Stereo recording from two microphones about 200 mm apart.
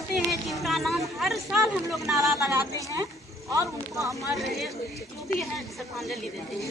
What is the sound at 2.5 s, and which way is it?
Speech, 15° right (ahead or behind).